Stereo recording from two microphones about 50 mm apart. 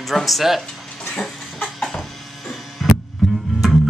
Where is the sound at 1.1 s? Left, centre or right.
Centre.